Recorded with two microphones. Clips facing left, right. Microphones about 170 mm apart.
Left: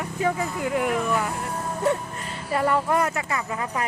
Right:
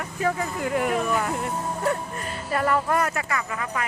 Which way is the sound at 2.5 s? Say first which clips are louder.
Left 1 dB; 20° left (ahead or behind).